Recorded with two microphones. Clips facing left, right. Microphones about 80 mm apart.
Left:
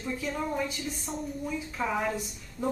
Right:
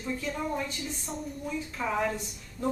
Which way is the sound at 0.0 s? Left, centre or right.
Centre.